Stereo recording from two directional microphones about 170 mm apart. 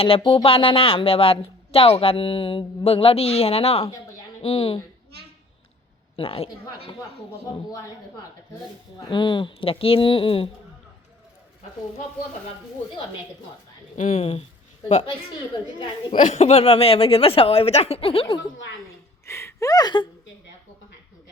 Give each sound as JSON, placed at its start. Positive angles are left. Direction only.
{"t": 0.0, "sound": "speech", "side_deg": 30}
{"t": 6.1, "sound": "speech", "side_deg": 35}
{"t": 7.5, "sound": "speech", "side_deg": 20}
{"t": 13.9, "sound": "speech", "side_deg": 45}
{"t": 16.1, "sound": "speech", "side_deg": 45}
{"t": 19.2, "sound": "speech", "side_deg": 15}